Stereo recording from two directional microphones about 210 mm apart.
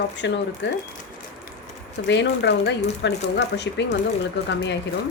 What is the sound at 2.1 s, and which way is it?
Speech, 55° left (ahead or behind).